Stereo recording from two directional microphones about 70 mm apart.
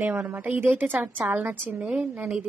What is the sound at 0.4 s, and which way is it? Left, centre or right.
A woman's voice, right.